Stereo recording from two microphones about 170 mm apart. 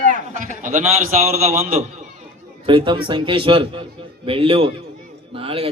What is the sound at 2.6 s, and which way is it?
A man's voice, 30° right (ahead or behind).